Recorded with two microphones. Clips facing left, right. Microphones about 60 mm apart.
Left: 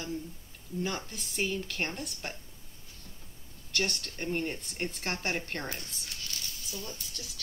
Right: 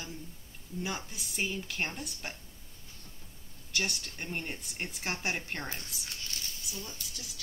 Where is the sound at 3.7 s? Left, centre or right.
Centre.